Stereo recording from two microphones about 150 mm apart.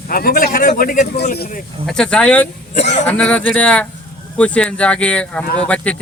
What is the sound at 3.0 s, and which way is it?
A man's voice, 10° left (ahead or behind).